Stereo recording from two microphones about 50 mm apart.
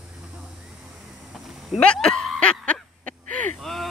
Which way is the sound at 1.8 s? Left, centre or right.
Centre.